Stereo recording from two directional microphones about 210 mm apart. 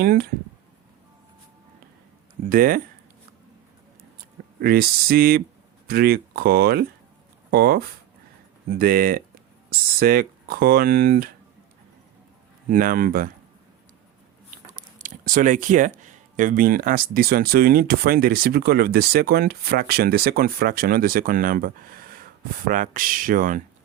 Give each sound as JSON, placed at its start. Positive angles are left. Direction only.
{"t": 0.0, "sound": "speech", "side_deg": -45}
{"t": 2.4, "sound": "speech", "side_deg": -40}
{"t": 4.6, "sound": "speech", "side_deg": -45}
{"t": 12.6, "sound": "speech", "side_deg": -40}
{"t": 14.9, "sound": "speech", "side_deg": -40}